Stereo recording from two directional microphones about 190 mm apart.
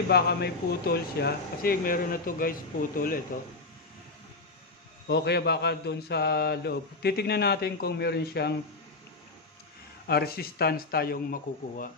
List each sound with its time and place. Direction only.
0.1 s speech: 55° left (ahead or behind)
5.0 s mantra: 60° left (ahead or behind)
10.0 s speech: 55° left (ahead or behind)